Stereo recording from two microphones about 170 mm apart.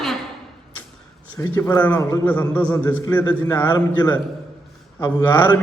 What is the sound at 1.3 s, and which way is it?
A man's voice, 20° left (ahead or behind).